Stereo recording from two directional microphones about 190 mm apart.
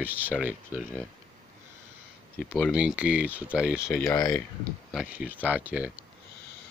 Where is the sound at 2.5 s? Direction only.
5° left (ahead or behind).